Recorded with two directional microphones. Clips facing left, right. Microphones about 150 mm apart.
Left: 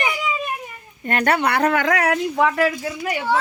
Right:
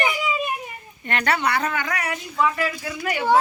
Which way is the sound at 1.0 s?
45° left (ahead or behind).